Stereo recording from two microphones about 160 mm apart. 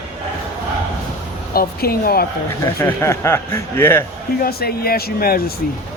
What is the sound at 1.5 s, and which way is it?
Speech, 70° left (ahead or behind).